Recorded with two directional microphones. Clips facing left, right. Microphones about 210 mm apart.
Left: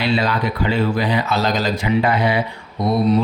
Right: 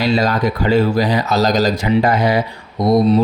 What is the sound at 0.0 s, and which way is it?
Speech, 45° right (ahead or behind).